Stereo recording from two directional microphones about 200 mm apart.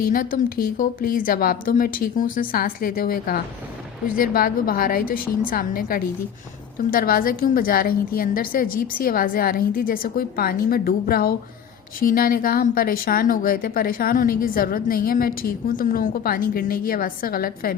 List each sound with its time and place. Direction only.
0.0 s speech: 45° left (ahead or behind)